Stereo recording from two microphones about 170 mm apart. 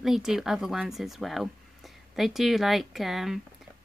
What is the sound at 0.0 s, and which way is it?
Speech, centre (ahead or behind).